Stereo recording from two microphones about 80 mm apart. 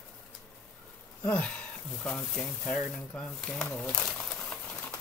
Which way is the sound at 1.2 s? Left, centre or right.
Centre.